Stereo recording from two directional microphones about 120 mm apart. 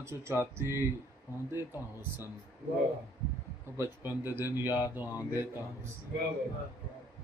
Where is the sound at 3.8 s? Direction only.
20° right (ahead or behind).